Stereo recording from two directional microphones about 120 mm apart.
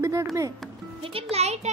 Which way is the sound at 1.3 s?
65° right (ahead or behind).